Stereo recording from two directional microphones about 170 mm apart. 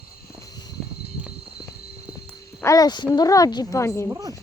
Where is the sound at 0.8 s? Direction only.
Centre (ahead or behind).